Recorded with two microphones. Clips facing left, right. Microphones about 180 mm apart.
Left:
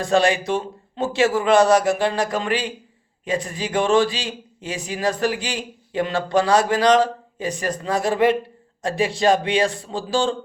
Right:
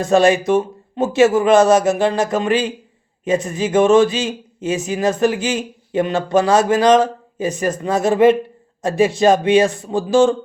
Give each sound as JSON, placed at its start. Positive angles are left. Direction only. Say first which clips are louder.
{"t": 0.0, "sound": "speech", "louder": "right 5 dB", "side_deg": -25}